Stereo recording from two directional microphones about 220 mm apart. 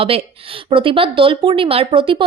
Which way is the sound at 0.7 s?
25° right (ahead or behind).